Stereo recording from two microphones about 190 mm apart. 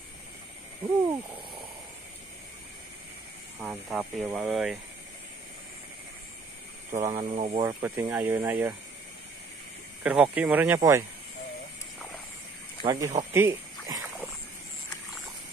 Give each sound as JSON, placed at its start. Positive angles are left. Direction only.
{"t": 3.6, "sound": "speech", "side_deg": -5}
{"t": 6.9, "sound": "speech", "side_deg": -30}
{"t": 7.6, "sound": "speech", "side_deg": -15}
{"t": 10.0, "sound": "speech", "side_deg": -5}
{"t": 12.8, "sound": "speech", "side_deg": -15}
{"t": 13.3, "sound": "a sound", "side_deg": -15}